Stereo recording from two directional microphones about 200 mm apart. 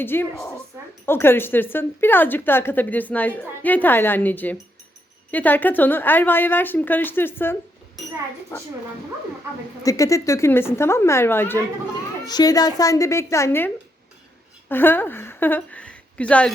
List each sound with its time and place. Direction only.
0.0 s speech: 10° left (ahead or behind)
9.8 s speech: 15° left (ahead or behind)
14.7 s a woman's voice: 10° left (ahead or behind)